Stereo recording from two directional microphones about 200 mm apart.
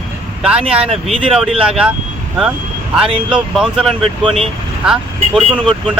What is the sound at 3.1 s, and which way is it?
Speech, 25° right (ahead or behind).